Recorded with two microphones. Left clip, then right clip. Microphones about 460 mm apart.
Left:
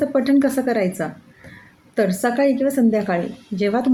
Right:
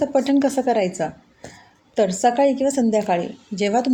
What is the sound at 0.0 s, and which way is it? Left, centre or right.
Speech, left.